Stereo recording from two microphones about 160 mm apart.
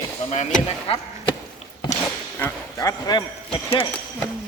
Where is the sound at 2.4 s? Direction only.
15° left (ahead or behind); by 3.9 s 35° left (ahead or behind).